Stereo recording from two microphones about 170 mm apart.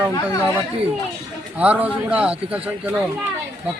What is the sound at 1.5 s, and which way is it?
A man's voice, 10° right (ahead or behind).